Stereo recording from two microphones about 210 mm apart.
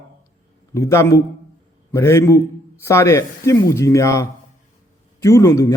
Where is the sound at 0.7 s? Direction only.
15° left (ahead or behind).